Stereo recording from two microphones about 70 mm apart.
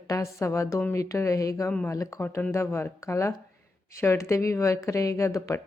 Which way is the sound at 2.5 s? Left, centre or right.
Left.